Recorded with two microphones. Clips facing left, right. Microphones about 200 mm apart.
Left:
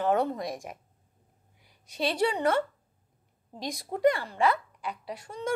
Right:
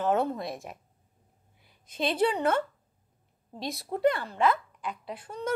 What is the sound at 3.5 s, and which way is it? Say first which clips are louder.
Speech: right 1 dB; 15° left (ahead or behind).